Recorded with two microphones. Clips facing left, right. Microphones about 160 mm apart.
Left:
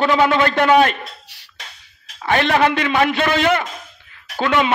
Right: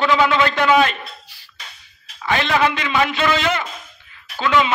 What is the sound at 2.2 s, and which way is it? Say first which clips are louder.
A man's voice: left 2 dB; 55° left (ahead or behind).